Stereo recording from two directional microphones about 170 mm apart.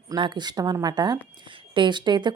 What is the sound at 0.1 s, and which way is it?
A woman's voice, 25° right (ahead or behind).